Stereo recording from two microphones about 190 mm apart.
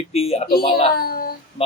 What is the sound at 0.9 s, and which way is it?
Speech, 55° left (ahead or behind).